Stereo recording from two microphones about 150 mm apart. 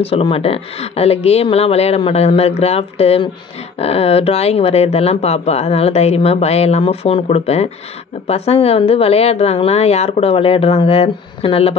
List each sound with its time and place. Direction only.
0.0 s a woman's voice: 40° left (ahead or behind)